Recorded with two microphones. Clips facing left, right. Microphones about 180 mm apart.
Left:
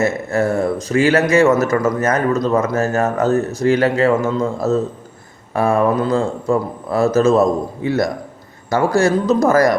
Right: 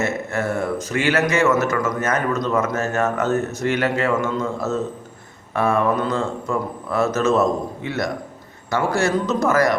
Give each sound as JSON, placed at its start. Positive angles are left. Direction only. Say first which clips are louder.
{"t": 0.0, "sound": "a man's voice", "louder": "left 6 dB", "side_deg": 35}